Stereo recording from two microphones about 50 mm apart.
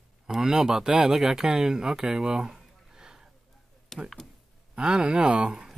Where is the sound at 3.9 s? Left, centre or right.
Centre.